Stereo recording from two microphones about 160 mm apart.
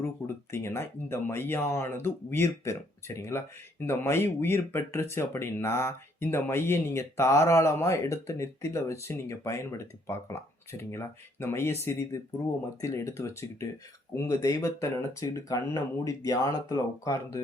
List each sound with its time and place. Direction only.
0.2 s speech: 15° left (ahead or behind)